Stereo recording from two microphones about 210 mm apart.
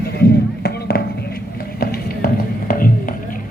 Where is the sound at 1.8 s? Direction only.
45° left (ahead or behind).